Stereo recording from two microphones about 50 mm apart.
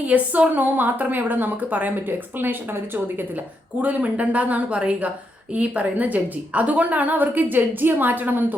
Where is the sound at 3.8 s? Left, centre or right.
Right.